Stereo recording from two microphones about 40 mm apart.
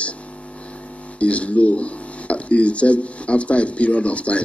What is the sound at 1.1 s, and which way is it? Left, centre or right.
Speech, left.